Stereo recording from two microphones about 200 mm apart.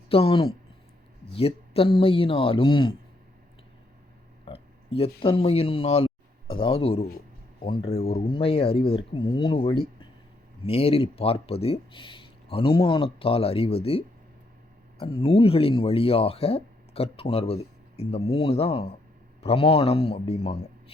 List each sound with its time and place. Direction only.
0.1 s speech: 30° left (ahead or behind)
4.9 s speech: 30° left (ahead or behind)
15.0 s speech: 25° left (ahead or behind)